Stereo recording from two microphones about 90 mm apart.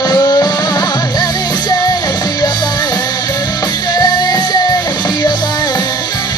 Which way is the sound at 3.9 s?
50° left (ahead or behind).